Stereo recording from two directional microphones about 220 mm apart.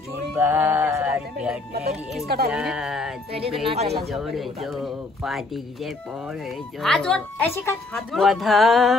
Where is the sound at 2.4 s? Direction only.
5° right (ahead or behind).